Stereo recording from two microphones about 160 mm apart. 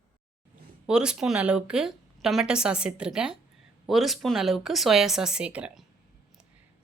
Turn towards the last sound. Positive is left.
turn(degrees=-5)  # may be behind; listen again after turning